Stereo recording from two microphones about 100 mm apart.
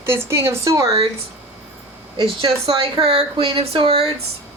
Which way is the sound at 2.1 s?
55° right (ahead or behind).